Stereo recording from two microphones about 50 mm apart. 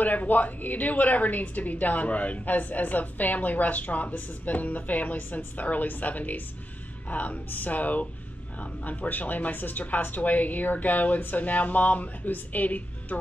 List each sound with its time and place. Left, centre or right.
0.0 s a woman's voice: left